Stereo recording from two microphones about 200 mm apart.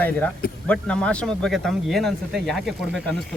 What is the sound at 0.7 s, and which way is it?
Speech, 5° left (ahead or behind).